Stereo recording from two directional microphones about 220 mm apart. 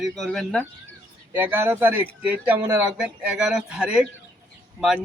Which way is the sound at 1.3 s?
10° right (ahead or behind).